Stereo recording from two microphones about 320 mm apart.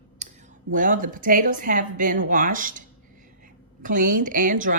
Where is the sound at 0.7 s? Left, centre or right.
Right.